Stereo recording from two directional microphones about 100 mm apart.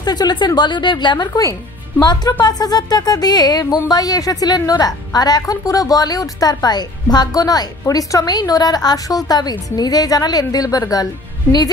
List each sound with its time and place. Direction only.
0.0 s a woman's voice: 45° left (ahead or behind)